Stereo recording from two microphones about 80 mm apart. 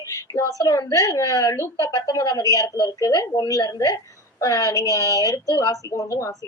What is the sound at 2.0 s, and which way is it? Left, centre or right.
A woman's voice, left.